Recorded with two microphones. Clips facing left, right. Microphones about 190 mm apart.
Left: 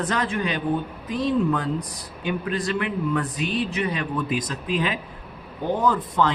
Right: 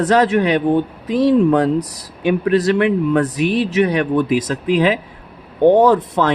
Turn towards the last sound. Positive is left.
turn(degrees=-75)  # may be behind; listen again after turning